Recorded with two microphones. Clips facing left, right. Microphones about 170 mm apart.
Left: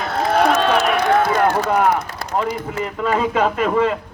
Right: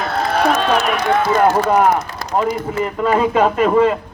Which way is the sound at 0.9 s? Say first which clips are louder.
Even; 55° left (ahead or behind).